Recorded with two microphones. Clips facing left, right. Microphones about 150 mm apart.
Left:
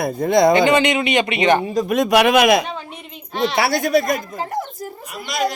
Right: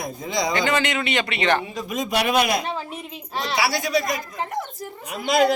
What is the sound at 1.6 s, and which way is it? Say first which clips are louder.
Speech: left 10 dB; 40° left (ahead or behind).